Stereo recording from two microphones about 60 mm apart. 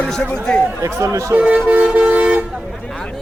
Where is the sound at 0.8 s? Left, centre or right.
Right.